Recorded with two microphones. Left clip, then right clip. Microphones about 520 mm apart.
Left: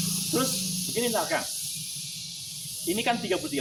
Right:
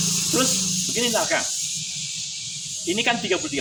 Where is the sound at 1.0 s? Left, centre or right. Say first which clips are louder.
Right 4 dB; left.